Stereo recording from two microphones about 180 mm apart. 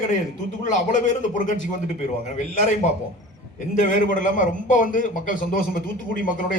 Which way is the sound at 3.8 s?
45° left (ahead or behind).